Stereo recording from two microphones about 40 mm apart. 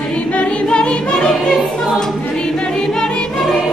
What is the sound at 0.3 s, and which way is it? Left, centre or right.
Choir, left.